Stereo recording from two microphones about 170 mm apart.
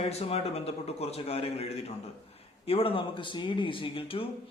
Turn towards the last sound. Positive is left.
turn(degrees=35)  # may be behind; listen again after turning